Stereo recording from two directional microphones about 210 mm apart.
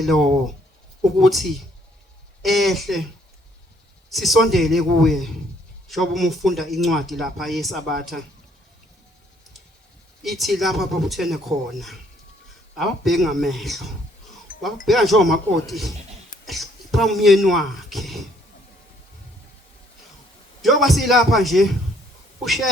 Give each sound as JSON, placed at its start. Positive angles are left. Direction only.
{"t": 0.0, "sound": "speech", "side_deg": 0}
{"t": 4.1, "sound": "speech", "side_deg": 0}
{"t": 10.2, "sound": "speech", "side_deg": 0}
{"t": 14.5, "sound": "music", "side_deg": 40}
{"t": 14.8, "sound": "speech", "side_deg": 0}
{"t": 20.6, "sound": "speech", "side_deg": 0}